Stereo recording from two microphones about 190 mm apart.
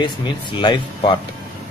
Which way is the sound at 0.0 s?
25° left (ahead or behind).